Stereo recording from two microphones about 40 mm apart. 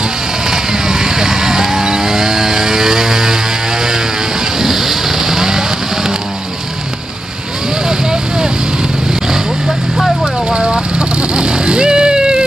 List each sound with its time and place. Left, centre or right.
0.5 s vehicle: centre
4.6 s vehicle: centre
9.3 s vehicle: centre
10.5 s vehicle: right